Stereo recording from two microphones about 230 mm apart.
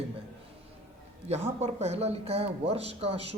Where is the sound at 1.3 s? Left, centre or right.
Right.